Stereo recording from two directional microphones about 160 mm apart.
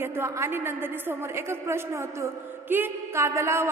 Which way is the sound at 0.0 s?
15° right (ahead or behind).